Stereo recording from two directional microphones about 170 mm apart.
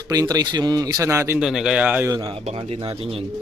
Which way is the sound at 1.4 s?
5° right (ahead or behind).